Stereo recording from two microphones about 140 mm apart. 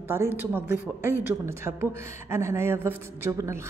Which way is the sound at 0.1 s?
15° right (ahead or behind).